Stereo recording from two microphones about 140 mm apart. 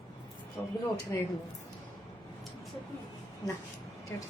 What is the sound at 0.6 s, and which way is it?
Speech, 20° left (ahead or behind).